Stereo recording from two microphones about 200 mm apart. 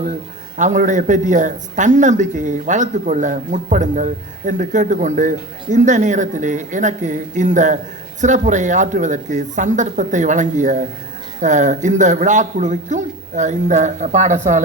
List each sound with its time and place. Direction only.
0.5 s a man's voice: 40° right (ahead or behind)